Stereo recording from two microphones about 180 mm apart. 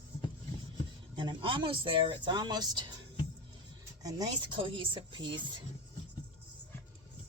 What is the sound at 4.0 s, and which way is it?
Speech, 20° right (ahead or behind).